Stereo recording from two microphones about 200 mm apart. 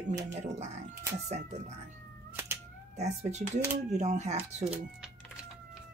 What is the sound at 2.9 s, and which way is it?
Speech, 35° right (ahead or behind).